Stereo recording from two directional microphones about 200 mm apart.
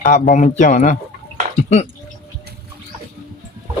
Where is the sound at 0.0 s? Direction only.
40° left (ahead or behind).